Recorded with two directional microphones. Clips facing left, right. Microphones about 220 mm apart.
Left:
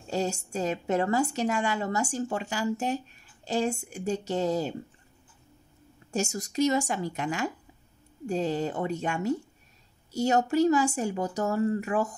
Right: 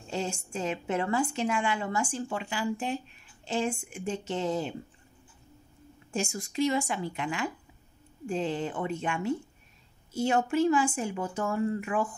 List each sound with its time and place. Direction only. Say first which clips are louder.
0.1 s a woman's voice: left 4 dB; 40° left (ahead or behind)
6.1 s a woman's voice: left 2 dB; 40° left (ahead or behind)